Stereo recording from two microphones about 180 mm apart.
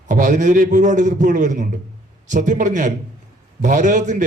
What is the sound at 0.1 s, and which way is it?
A man's voice, 45° right (ahead or behind).